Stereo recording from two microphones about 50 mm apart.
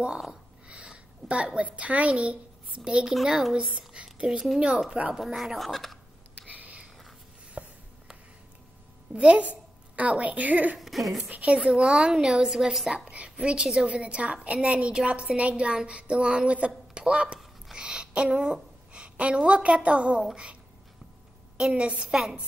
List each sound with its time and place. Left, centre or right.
0.3 s a sound: centre
3.5 s speech: centre
5.1 s speech: centre
6.4 s a sound: right
7.6 s writing: right
9.1 s a woman's voice: right
10.8 s speech: centre
11.2 s a woman's voice: right; by 12.9 s centre
12.9 s a woman's voice: right
21.5 s a woman's voice: centre
21.8 s a woman's voice: right
22.1 s a woman's voice: centre